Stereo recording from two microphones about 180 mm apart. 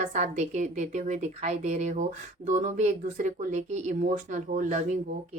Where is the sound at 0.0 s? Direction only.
40° right (ahead or behind).